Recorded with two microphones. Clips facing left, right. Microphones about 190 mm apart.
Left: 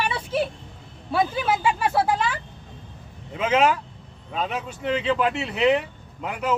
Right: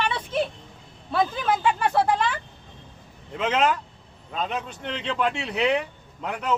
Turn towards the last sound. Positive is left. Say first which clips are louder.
# left 1 dB
turn(degrees=5)  # may be behind; listen again after turning